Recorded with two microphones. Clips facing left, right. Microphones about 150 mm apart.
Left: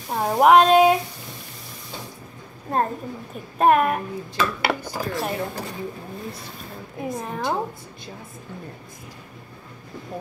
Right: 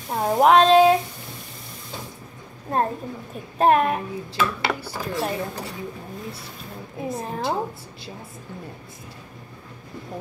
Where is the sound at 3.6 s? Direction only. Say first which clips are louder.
Left 1 dB; 30° right (ahead or behind).